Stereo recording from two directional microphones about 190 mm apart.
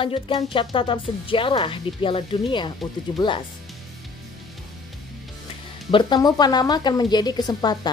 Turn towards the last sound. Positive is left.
turn(degrees=20)  # may be behind; listen again after turning